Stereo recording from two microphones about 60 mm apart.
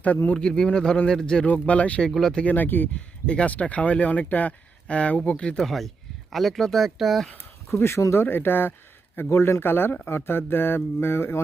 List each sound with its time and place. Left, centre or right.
0.0 s speech: left
0.3 s speech: centre
1.5 s speech: left
2.0 s speech: centre
2.4 s speech: left
3.2 s speech: left
5.6 s speech: centre
7.3 s a sound: left
8.1 s speech: left